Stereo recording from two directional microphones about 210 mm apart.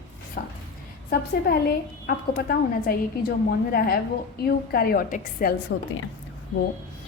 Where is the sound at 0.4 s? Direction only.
45° left (ahead or behind).